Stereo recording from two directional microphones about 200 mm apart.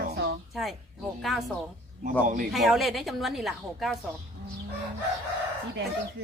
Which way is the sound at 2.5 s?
Centre (ahead or behind).